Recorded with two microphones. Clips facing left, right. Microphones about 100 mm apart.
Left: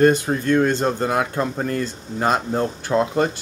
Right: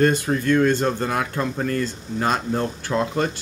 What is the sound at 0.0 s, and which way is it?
Speech, 20° left (ahead or behind).